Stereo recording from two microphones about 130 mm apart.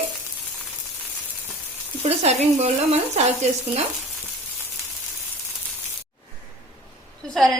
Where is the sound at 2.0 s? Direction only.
55° right (ahead or behind).